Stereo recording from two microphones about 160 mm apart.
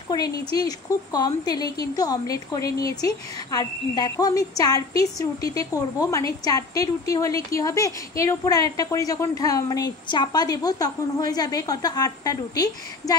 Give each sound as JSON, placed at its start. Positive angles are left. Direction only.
{"t": 0.1, "sound": "a woman's voice", "side_deg": 25}